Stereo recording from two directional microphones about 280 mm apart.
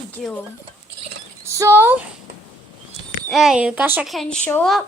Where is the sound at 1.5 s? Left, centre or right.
Centre.